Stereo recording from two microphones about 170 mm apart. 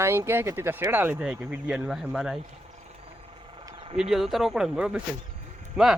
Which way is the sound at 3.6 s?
30° right (ahead or behind).